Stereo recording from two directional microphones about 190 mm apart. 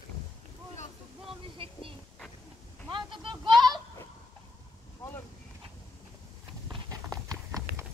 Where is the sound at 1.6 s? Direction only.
30° right (ahead or behind).